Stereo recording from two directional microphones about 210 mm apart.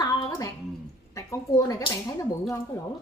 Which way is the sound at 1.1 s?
15° left (ahead or behind).